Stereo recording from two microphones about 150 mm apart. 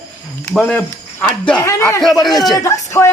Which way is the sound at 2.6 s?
20° left (ahead or behind).